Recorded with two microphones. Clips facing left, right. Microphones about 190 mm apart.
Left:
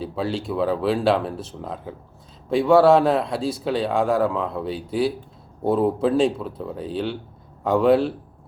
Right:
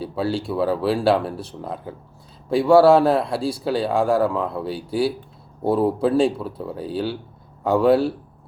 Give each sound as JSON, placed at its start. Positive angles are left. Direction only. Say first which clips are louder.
{"t": 0.0, "sound": "speech", "louder": "right 2 dB", "side_deg": 0}